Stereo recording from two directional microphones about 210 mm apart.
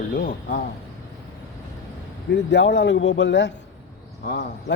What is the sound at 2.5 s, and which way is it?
Speech, 60° left (ahead or behind).